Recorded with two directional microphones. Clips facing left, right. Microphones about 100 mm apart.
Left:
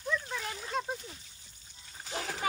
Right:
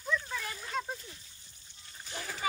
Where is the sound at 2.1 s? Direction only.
90° left.